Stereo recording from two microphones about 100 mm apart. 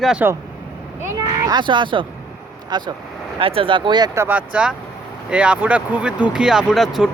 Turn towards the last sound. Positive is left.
turn(degrees=0)  # may be behind; listen again after turning